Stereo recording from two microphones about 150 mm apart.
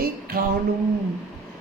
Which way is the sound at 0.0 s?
80° right.